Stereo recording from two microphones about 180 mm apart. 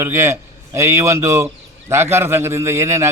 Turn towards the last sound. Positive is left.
turn(degrees=-15)  # may be behind; listen again after turning